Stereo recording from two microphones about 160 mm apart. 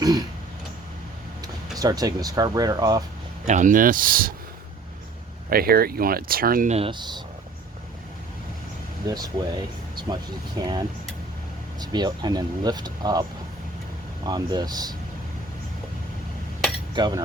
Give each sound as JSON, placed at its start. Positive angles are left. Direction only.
{"t": 0.0, "sound": "a sound", "side_deg": -25}
{"t": 1.8, "sound": "speech", "side_deg": -25}
{"t": 3.4, "sound": "speech", "side_deg": -50}
{"t": 5.5, "sound": "speech", "side_deg": -70}
{"t": 6.7, "sound": "speech", "side_deg": -35}
{"t": 9.0, "sound": "speech", "side_deg": -25}
{"t": 14.3, "sound": "speech", "side_deg": -25}
{"t": 16.9, "sound": "speech", "side_deg": -25}